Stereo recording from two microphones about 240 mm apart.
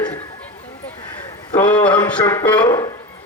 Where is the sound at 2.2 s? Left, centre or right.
Centre.